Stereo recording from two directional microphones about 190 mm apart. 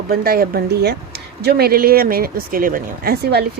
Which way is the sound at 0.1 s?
55° right (ahead or behind).